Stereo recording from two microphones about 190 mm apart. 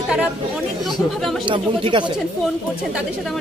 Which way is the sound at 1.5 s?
25° right (ahead or behind).